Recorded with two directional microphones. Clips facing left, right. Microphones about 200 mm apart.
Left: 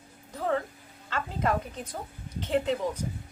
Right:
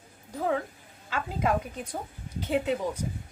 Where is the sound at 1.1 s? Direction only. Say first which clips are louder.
Right 1 dB; 10° right (ahead or behind).